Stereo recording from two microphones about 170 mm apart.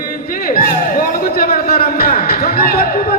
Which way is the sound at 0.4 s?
55° left (ahead or behind).